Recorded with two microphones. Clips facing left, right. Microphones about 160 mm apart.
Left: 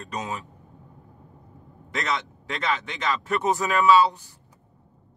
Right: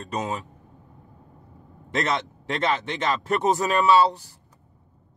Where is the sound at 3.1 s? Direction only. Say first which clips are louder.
Right 2 dB; 35° right (ahead or behind).